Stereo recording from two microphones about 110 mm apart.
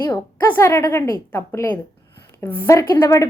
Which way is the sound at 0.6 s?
25° left (ahead or behind).